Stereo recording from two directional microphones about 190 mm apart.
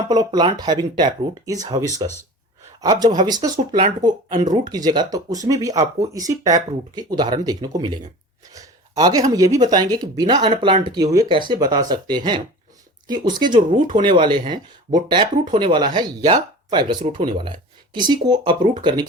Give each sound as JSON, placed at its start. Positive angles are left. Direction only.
{"t": 0.1, "sound": "speech", "side_deg": -20}